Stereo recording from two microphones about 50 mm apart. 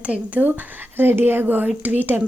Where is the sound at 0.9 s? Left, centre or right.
Right.